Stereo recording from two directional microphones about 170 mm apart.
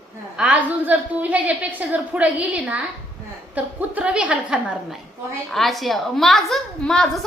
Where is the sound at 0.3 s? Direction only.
10° right (ahead or behind).